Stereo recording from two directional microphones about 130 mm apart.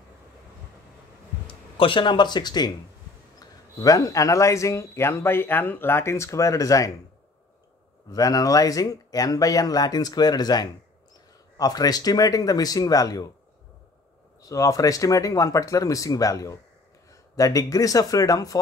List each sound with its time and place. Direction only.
1.5 s speech: 40° left (ahead or behind); by 6.9 s 25° left (ahead or behind)
8.1 s speech: 25° left (ahead or behind)
14.4 s speech: 25° left (ahead or behind)